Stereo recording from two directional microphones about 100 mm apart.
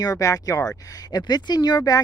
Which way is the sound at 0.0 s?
35° left (ahead or behind).